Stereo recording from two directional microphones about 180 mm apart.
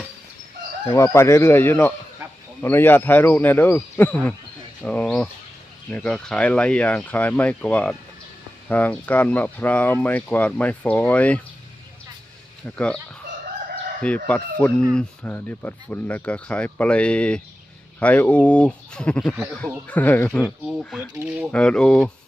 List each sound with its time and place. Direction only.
0.9 s speech: 15° left (ahead or behind)
12.7 s speech: 5° left (ahead or behind)
14.3 s speech: 10° left (ahead or behind)
20.7 s speech: centre (ahead or behind)